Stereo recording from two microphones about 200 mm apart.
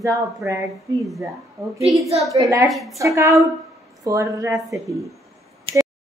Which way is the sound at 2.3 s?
15° right (ahead or behind).